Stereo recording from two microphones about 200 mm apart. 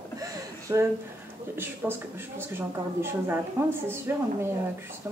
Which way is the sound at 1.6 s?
10° right (ahead or behind).